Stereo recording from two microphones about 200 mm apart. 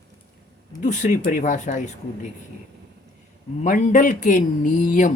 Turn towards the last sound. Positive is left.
turn(degrees=40)  # may be behind; listen again after turning